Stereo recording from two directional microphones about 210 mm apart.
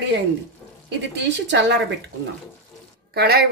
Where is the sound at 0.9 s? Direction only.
55° right (ahead or behind).